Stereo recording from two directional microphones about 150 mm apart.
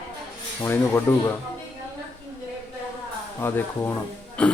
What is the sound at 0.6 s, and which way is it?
Speech, 15° left (ahead or behind).